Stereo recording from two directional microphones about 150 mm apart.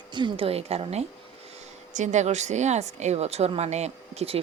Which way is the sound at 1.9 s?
55° right (ahead or behind).